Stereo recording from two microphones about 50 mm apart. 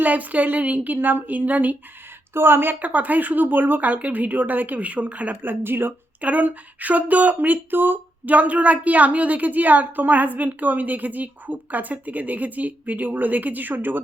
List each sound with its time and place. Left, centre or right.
0.0 s speech: right
0.9 s speech: right
2.3 s speech: right
2.7 s speech: right
5.4 s speech: right
6.2 s speech: right